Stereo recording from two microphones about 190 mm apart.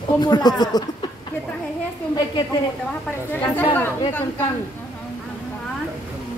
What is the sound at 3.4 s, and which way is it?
Speech, 10° left (ahead or behind).